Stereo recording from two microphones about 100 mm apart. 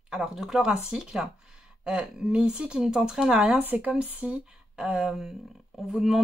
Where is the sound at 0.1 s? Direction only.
5° right (ahead or behind).